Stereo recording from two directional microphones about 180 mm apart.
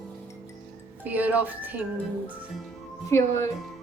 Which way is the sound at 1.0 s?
10° right (ahead or behind).